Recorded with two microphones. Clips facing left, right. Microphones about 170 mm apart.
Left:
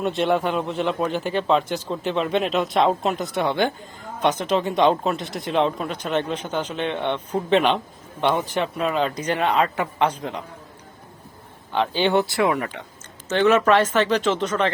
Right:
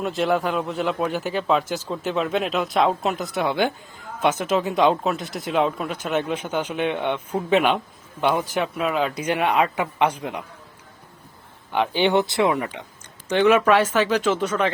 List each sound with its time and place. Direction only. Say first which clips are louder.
0.0 s speech: left 1 dB; centre (ahead or behind)
11.7 s speech: even; 15° right (ahead or behind)